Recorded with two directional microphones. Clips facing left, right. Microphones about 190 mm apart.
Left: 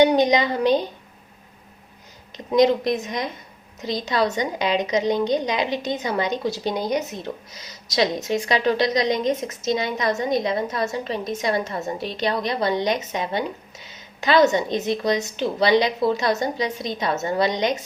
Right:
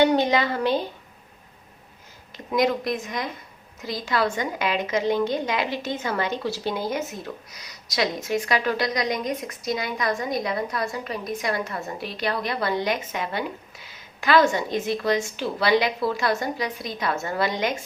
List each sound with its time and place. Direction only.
0.0 s a woman's voice: 15° left (ahead or behind)
2.3 s a woman's voice: 20° left (ahead or behind)